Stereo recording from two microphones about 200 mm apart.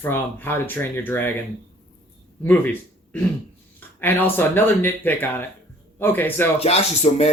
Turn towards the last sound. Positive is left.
turn(degrees=30)  # may be behind; listen again after turning